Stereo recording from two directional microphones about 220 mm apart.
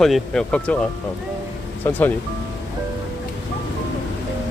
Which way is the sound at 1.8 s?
10° left (ahead or behind).